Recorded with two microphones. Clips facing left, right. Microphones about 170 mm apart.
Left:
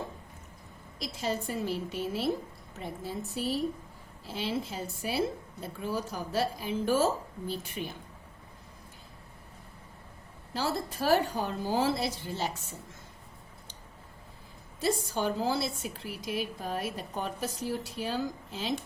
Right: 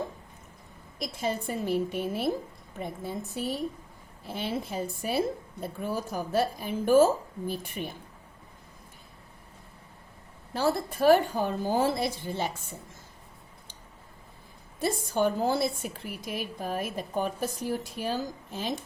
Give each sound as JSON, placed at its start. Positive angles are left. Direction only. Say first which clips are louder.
{"t": 0.9, "sound": "a woman's voice", "louder": "right 2 dB", "side_deg": -55}
{"t": 10.5, "sound": "a woman's voice", "louder": "right 5 dB", "side_deg": -55}
{"t": 14.8, "sound": "a woman's voice", "louder": "right 3 dB", "side_deg": -55}